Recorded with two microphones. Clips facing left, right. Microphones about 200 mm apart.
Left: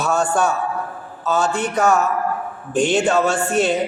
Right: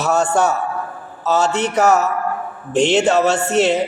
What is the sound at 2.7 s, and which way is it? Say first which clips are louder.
A man's voice: right 2 dB; 25° right (ahead or behind).